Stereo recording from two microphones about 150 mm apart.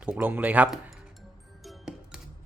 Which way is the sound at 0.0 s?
10° right (ahead or behind).